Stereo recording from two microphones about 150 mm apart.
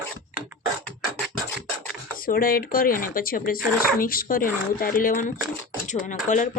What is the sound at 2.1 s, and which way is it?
Speech, 70° left (ahead or behind).